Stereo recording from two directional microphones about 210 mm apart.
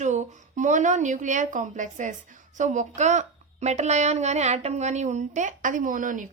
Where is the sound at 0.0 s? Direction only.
35° right (ahead or behind).